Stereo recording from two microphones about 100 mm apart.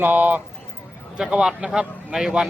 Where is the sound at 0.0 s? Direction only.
15° right (ahead or behind).